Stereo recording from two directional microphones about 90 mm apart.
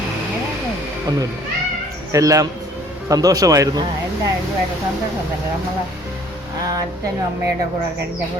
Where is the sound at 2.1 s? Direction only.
40° right (ahead or behind).